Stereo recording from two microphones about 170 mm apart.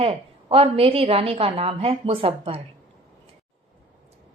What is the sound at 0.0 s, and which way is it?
A woman's voice, 35° right (ahead or behind).